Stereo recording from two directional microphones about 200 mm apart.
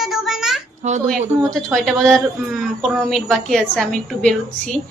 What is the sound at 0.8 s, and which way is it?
Speech, 35° right (ahead or behind).